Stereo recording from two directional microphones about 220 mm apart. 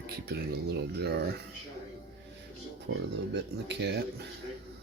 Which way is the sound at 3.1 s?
50° right (ahead or behind).